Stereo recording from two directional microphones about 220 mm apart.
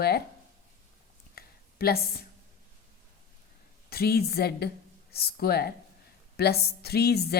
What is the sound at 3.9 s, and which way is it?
Speech, 45° left (ahead or behind).